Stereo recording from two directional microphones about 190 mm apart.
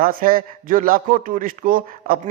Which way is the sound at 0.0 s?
50° right (ahead or behind).